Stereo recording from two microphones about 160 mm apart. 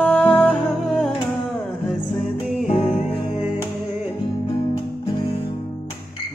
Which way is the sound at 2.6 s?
40° left (ahead or behind).